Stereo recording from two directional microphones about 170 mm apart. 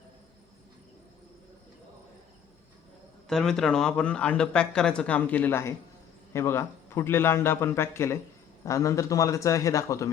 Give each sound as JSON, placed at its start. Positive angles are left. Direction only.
{"t": 3.2, "sound": "a man's voice", "side_deg": 5}